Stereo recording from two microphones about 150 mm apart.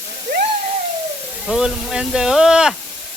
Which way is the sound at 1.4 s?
5° right (ahead or behind).